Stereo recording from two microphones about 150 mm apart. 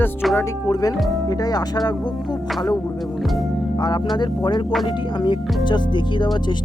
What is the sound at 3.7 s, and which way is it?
Speech, 30° left (ahead or behind).